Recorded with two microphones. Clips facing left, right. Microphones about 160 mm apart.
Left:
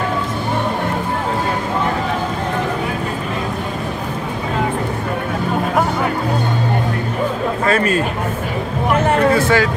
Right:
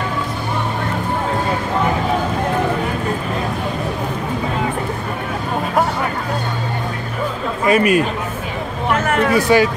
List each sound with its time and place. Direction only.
7.6 s a man's voice: 15° right (ahead or behind)
9.3 s speech: 15° right (ahead or behind)